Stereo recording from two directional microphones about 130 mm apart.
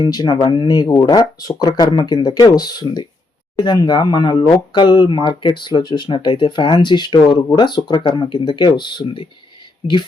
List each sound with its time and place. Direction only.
0.0 s speech: 30° left (ahead or behind)